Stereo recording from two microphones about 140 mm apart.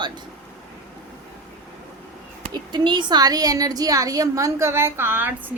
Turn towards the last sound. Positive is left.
turn(degrees=-15)  # may be behind; listen again after turning